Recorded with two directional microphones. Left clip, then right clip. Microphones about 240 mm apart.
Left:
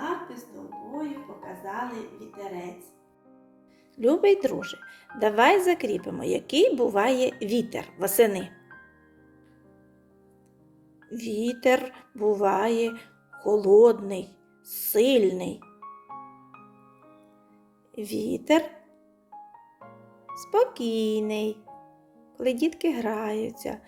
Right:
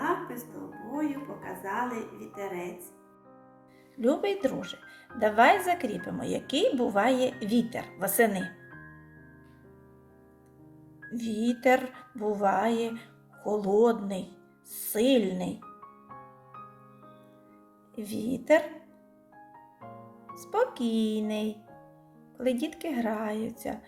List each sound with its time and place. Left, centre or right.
0.0 s music: centre
4.0 s speech: left
11.1 s a woman's voice: left
17.9 s speech: left
20.3 s speech: left